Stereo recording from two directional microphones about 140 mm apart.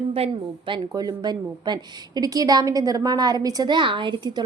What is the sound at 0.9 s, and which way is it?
A woman's voice, 30° right (ahead or behind).